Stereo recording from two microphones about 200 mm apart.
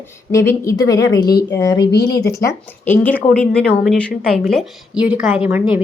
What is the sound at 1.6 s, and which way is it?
A woman's voice, 20° left (ahead or behind).